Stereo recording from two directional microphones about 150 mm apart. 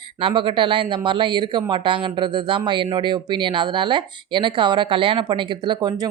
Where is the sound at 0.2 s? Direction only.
35° right (ahead or behind).